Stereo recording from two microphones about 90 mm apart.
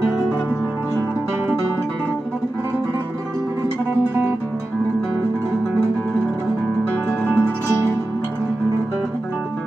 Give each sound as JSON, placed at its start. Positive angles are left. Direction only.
{"t": 7.2, "sound": "music", "side_deg": 20}